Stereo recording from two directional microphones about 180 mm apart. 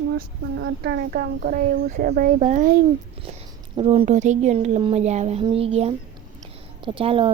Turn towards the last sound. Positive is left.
turn(degrees=-30)  # may be behind; listen again after turning